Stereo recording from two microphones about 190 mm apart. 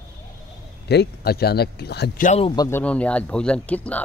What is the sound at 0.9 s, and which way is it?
Speech, 60° left (ahead or behind).